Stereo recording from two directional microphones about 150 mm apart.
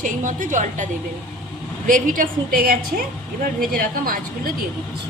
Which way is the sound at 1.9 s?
60° right (ahead or behind).